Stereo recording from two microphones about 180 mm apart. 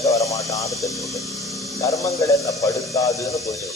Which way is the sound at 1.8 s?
15° left (ahead or behind).